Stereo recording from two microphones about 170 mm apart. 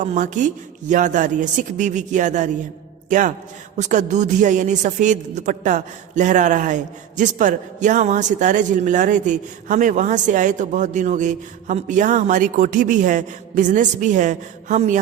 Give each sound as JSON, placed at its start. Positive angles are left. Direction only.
{"t": 0.0, "sound": "a man's voice", "side_deg": -45}